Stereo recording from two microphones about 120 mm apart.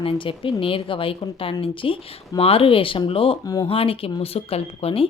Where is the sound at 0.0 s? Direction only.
45° left (ahead or behind).